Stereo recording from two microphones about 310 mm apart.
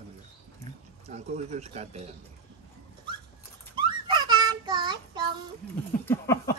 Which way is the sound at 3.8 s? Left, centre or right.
Centre.